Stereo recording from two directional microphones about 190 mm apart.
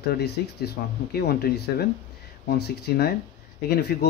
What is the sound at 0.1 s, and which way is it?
Speech, 60° left (ahead or behind).